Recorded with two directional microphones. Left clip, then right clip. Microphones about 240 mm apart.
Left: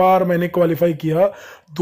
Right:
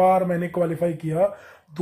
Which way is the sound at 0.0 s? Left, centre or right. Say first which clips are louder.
Left 4 dB; left.